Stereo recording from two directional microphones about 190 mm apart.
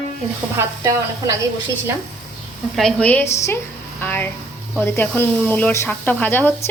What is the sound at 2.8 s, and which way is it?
Speech, 5° left (ahead or behind).